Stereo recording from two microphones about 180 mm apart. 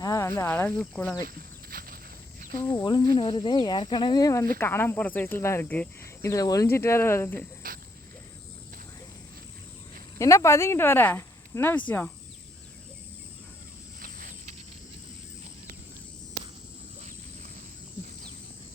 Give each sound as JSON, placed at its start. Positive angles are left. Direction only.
{"t": 0.0, "sound": "speech", "side_deg": 15}
{"t": 1.7, "sound": "walk", "side_deg": -50}
{"t": 2.5, "sound": "speech", "side_deg": 20}
{"t": 7.6, "sound": "a sound", "side_deg": -50}
{"t": 10.2, "sound": "speech", "side_deg": 15}
{"t": 14.0, "sound": "cricket", "side_deg": -45}